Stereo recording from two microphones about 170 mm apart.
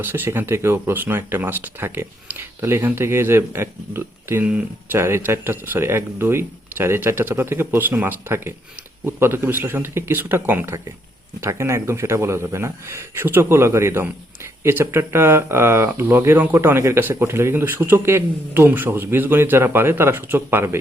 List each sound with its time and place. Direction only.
0.0 s speech: 15° right (ahead or behind)